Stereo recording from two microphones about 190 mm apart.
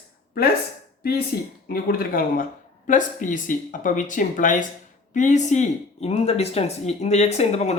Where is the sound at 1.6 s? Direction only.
50° left (ahead or behind).